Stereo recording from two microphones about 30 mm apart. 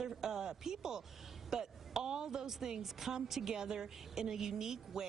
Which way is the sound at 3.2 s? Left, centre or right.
Centre.